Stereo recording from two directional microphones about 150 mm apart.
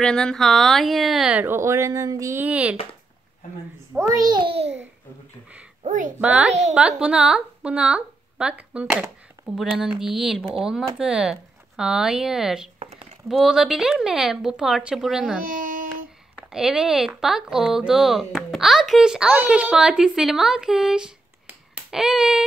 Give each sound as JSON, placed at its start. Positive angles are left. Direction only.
{"t": 0.0, "sound": "speech", "side_deg": 5}
{"t": 4.1, "sound": "a child's voice", "side_deg": -30}
{"t": 5.9, "sound": "a child's voice", "side_deg": -60}
{"t": 6.2, "sound": "a woman's voice", "side_deg": -10}
{"t": 15.4, "sound": "a sound", "side_deg": -65}
{"t": 16.3, "sound": "speech", "side_deg": -5}